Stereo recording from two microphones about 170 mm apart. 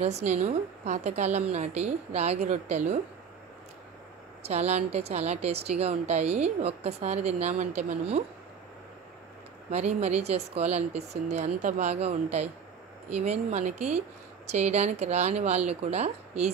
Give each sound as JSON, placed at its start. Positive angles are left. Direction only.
{"t": 0.0, "sound": "a woman's voice", "side_deg": -40}
{"t": 4.5, "sound": "a woman's voice", "side_deg": -40}
{"t": 9.7, "sound": "a woman's voice", "side_deg": -40}